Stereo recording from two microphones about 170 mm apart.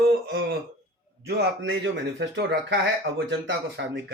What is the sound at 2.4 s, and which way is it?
Speech, 90° right.